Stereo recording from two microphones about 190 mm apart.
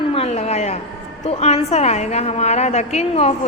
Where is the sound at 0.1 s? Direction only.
30° left (ahead or behind).